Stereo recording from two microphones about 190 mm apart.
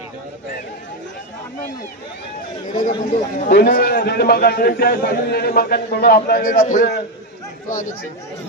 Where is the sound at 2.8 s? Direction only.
45° left (ahead or behind).